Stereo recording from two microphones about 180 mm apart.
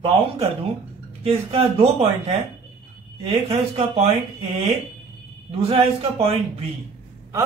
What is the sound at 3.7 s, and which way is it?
Speech, 35° right (ahead or behind).